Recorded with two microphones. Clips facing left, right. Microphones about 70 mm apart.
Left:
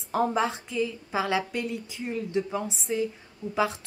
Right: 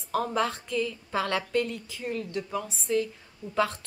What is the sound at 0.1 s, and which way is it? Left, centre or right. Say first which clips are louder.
A woman's voice: left 2 dB; centre.